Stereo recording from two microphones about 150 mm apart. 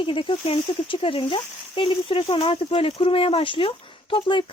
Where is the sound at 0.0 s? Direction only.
35° left (ahead or behind).